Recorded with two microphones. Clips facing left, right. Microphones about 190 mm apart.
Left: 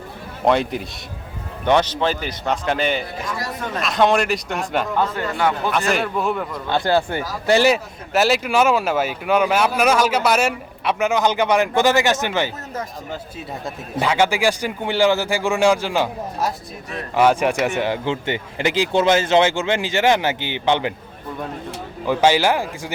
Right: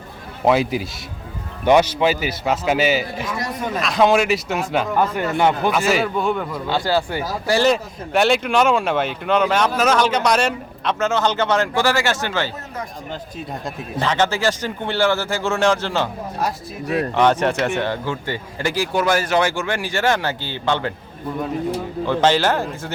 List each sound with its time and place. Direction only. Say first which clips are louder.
0.4 s a man's voice: right 1 dB; 5° right (ahead or behind)
4.9 s a man's voice: right 2 dB; 15° right (ahead or behind)
5.7 s speech: right 2 dB; centre (ahead or behind)
6.9 s speech: left 1 dB; 20° left (ahead or behind)
7.6 s speech: even; 5° left (ahead or behind)
13.1 s speech: right 1 dB; 5° left (ahead or behind)
17.2 s speech: left 2 dB; 10° left (ahead or behind)
17.8 s speech: left 2 dB; 15° left (ahead or behind)
22.0 s speech: left 1 dB; 10° left (ahead or behind)